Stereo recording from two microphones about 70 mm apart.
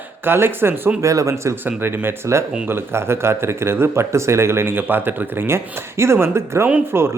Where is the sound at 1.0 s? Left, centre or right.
Right.